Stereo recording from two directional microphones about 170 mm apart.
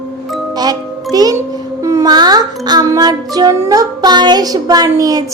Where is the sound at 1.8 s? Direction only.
20° right (ahead or behind).